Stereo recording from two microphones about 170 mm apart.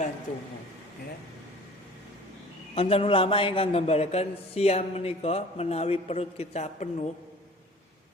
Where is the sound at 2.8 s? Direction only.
35° left (ahead or behind).